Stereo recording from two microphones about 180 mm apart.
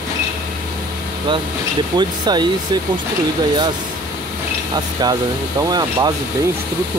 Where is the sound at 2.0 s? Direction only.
25° right (ahead or behind).